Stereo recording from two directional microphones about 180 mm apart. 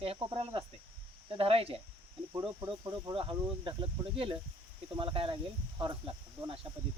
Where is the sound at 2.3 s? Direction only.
20° right (ahead or behind).